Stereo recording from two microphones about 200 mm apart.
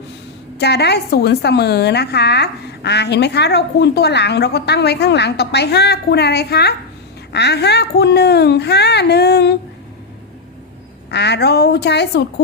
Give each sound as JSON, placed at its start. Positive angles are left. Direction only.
{"t": 0.6, "sound": "a woman's voice", "side_deg": 55}
{"t": 11.1, "sound": "a woman's voice", "side_deg": 55}